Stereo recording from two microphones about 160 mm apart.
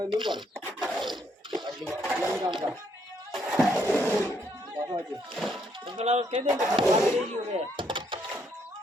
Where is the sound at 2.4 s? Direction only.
30° right (ahead or behind).